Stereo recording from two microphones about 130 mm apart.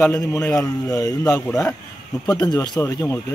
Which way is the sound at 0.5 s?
25° left (ahead or behind).